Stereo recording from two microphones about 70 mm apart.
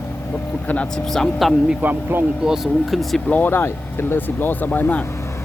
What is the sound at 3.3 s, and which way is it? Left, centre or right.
Speech, left.